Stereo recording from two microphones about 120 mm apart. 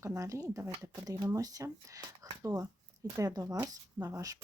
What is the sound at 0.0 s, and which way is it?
Speech, 25° right (ahead or behind).